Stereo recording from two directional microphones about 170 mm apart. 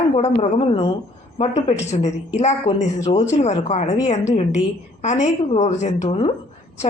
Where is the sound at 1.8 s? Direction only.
40° left (ahead or behind).